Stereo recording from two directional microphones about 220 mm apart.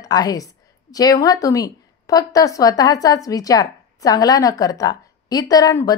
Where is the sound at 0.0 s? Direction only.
15° left (ahead or behind).